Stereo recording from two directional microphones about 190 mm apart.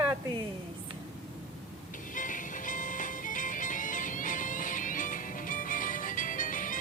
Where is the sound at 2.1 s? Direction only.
45° left (ahead or behind).